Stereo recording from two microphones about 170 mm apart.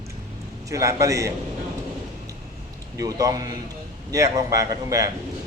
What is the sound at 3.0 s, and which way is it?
A man's voice, 20° right (ahead or behind).